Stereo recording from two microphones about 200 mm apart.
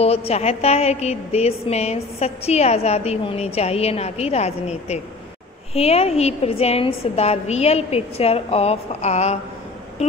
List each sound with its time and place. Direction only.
0.0 s a woman's voice: 30° left (ahead or behind)